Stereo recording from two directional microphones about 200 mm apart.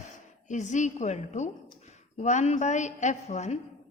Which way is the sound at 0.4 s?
35° left (ahead or behind).